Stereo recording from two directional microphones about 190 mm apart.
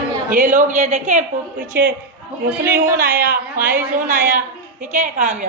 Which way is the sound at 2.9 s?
55° right (ahead or behind).